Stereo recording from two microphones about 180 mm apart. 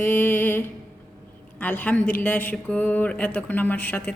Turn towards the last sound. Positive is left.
turn(degrees=10)  # may be behind; listen again after turning